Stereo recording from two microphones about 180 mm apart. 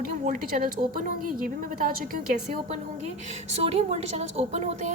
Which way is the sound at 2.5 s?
40° right (ahead or behind).